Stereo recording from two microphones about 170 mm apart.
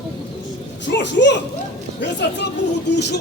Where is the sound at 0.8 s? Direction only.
90° left.